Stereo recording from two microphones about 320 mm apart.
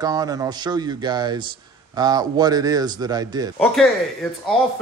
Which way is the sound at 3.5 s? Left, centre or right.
Centre.